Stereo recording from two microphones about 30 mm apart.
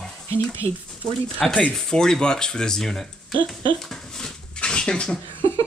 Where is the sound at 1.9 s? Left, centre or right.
Left.